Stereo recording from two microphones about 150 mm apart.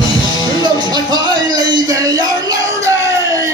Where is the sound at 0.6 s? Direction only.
30° right (ahead or behind).